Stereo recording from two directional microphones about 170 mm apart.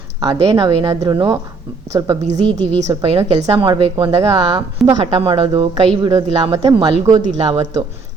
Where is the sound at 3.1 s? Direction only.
30° right (ahead or behind).